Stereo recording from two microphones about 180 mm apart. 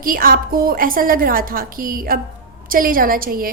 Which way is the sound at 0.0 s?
55° right (ahead or behind).